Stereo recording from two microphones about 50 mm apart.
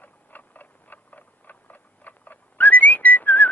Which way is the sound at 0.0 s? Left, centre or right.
Left.